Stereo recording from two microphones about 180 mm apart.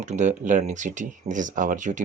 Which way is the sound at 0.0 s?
40° right (ahead or behind).